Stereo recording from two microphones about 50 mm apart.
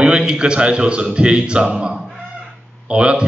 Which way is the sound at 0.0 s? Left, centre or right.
Centre.